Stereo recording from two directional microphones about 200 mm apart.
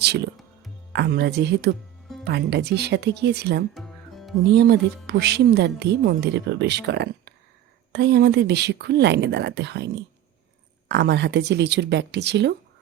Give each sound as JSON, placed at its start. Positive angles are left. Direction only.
{"t": 0.0, "sound": "speech", "side_deg": -55}
{"t": 3.8, "sound": "music", "side_deg": 0}
{"t": 4.5, "sound": "speech", "side_deg": -55}